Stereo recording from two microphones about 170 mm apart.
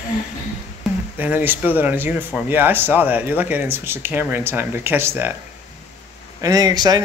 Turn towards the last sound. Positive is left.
turn(degrees=-25)  # may be behind; listen again after turning